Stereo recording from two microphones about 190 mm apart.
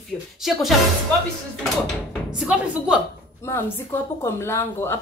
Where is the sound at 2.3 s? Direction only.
5° right (ahead or behind).